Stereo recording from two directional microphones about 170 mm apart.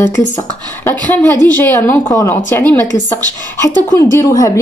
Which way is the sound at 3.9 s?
15° left (ahead or behind).